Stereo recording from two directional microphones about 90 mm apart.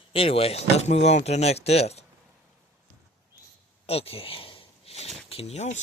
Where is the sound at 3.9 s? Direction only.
90° left.